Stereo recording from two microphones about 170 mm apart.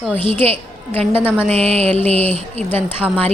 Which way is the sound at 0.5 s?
10° left (ahead or behind).